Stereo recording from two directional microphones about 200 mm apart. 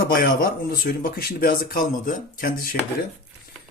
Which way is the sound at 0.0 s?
45° left (ahead or behind).